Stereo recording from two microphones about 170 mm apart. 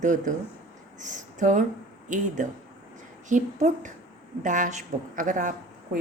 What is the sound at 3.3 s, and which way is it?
A woman's voice, 45° right (ahead or behind).